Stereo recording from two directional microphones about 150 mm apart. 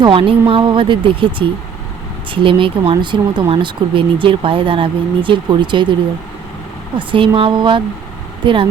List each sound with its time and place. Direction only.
0.0 s speech: 35° right (ahead or behind)
6.9 s speech: 35° right (ahead or behind)